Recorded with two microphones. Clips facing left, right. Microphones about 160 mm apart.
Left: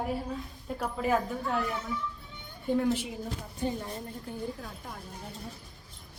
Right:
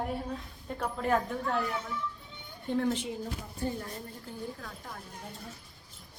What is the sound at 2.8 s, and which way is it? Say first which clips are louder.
Speech: even; 5° left (ahead or behind).